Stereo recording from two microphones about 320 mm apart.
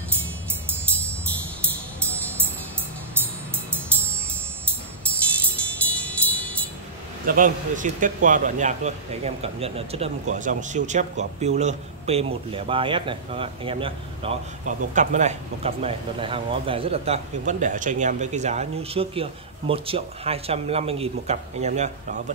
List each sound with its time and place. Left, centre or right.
5.6 s music: centre
7.2 s speech: right